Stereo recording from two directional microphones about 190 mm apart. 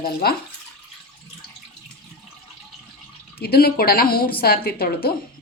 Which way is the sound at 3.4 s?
55° left (ahead or behind).